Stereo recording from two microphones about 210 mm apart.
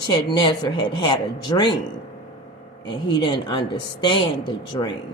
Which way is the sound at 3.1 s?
20° left (ahead or behind).